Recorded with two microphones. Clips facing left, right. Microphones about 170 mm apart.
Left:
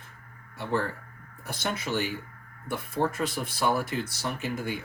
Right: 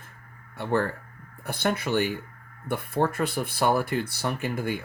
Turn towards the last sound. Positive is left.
turn(degrees=-55)  # may be behind; listen again after turning